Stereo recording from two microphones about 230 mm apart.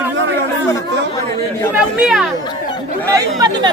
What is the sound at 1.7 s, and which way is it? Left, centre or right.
Speech, centre.